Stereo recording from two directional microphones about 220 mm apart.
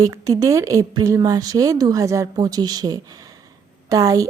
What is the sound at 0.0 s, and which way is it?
A woman's voice, 15° right (ahead or behind).